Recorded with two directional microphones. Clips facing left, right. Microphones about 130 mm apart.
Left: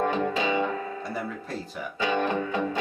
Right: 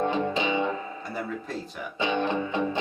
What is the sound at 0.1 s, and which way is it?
Music, 25° right (ahead or behind).